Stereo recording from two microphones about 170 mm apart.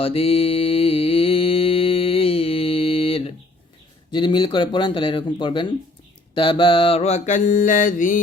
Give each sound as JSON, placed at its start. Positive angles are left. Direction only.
{"t": 0.0, "sound": "mantra", "side_deg": 35}
{"t": 4.1, "sound": "speech", "side_deg": 25}
{"t": 6.3, "sound": "mantra", "side_deg": 30}